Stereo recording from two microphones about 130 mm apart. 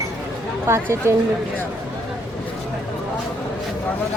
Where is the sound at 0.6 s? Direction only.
20° right (ahead or behind).